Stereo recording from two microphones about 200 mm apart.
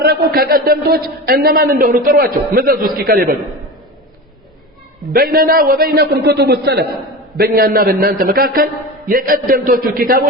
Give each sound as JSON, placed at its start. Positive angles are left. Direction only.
{"t": 0.0, "sound": "a man's voice", "side_deg": -50}
{"t": 5.1, "sound": "a man's voice", "side_deg": -45}